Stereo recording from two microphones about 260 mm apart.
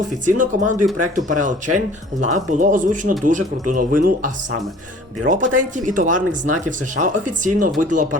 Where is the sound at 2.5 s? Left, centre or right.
Right.